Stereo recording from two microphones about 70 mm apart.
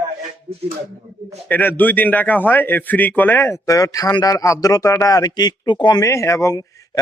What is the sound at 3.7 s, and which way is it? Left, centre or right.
Speech, left.